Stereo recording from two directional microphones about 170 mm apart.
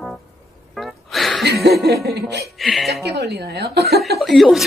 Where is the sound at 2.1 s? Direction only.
75° right (ahead or behind).